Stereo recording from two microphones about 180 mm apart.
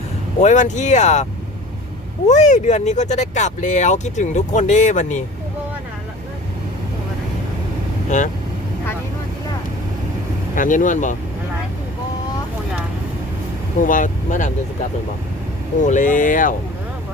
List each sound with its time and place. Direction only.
0.4 s speech: 40° left (ahead or behind)
8.1 s speech: 40° left (ahead or behind)
10.5 s speech: 45° left (ahead or behind)
13.8 s speech: 45° left (ahead or behind)
15.9 s speech: 45° left (ahead or behind)